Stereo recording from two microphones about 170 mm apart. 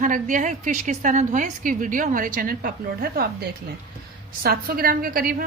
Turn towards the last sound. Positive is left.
turn(degrees=-60)  # may be behind; listen again after turning